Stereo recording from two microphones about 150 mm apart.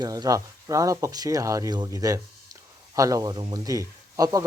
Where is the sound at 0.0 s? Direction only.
25° right (ahead or behind).